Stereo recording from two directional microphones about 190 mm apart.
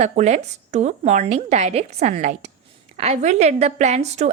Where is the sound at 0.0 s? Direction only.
35° right (ahead or behind).